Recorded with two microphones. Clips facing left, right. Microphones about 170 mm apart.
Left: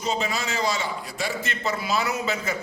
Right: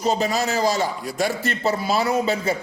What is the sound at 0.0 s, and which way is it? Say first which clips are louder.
A man's voice: right 6 dB; 40° right (ahead or behind).